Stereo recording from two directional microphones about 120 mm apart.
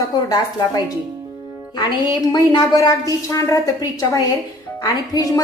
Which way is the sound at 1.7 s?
40° left (ahead or behind).